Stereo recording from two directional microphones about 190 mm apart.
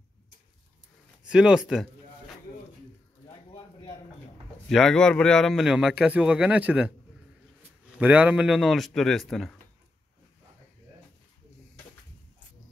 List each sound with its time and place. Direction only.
1.2 s speech: 5° right (ahead or behind)
3.3 s a sound: 20° left (ahead or behind)
4.6 s speech: centre (ahead or behind)